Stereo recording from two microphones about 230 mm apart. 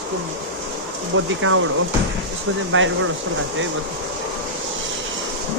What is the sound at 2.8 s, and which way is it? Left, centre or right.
Speech, right.